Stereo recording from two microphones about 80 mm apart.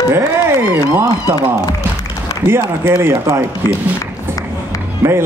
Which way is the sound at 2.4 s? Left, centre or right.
Right.